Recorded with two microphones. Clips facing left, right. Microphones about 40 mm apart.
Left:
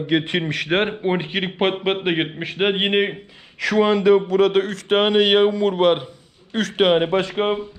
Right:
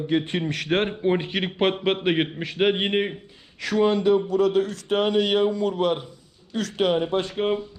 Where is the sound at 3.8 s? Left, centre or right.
Left.